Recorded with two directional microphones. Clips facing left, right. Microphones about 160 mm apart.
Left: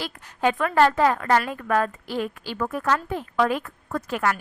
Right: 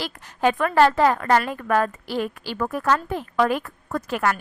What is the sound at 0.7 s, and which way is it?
A woman's voice, 35° right (ahead or behind).